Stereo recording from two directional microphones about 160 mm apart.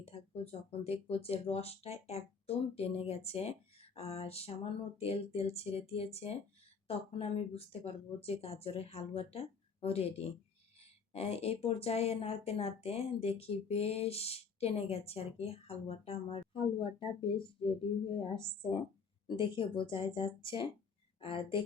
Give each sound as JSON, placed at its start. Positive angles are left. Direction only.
{"t": 0.0, "sound": "speech", "side_deg": 40}